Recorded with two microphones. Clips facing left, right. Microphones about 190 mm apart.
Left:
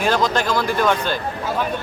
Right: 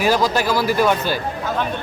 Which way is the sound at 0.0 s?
5° right (ahead or behind).